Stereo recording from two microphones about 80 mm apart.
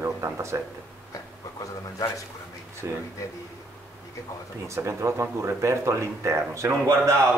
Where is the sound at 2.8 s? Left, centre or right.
Right.